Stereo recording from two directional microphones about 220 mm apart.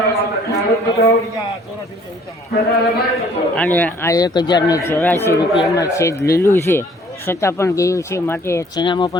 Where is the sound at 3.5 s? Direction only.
5° left (ahead or behind).